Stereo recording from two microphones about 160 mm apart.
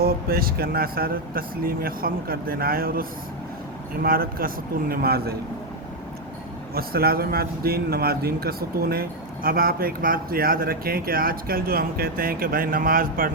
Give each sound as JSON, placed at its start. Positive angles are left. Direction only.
{"t": 0.0, "sound": "a man's voice", "side_deg": -70}
{"t": 6.7, "sound": "a man's voice", "side_deg": -70}